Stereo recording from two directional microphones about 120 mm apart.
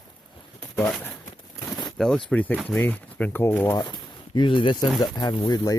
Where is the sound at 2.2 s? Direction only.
10° left (ahead or behind).